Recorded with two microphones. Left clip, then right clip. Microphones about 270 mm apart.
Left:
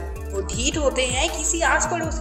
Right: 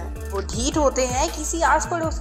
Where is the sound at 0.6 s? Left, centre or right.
Centre.